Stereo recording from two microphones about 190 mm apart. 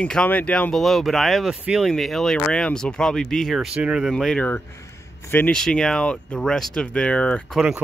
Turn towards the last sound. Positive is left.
turn(degrees=5)  # may be behind; listen again after turning